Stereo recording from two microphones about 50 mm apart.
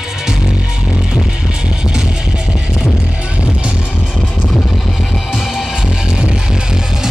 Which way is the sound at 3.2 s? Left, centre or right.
Right.